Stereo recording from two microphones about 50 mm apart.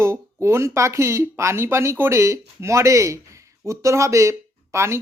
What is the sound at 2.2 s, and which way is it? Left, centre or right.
Speech, right.